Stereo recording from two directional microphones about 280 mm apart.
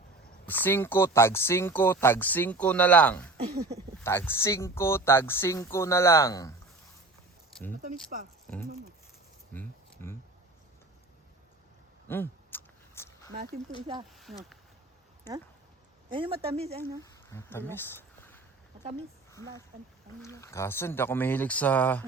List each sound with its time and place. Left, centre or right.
0.4 s speech: centre
3.3 s speech: right
4.0 s speech: centre
8.1 s speech: right
9.5 s a sound: centre
12.0 s a sound: centre
13.3 s speech: right
14.1 s speech: centre
16.0 s speech: centre
17.0 s speech: centre
20.2 s speech: centre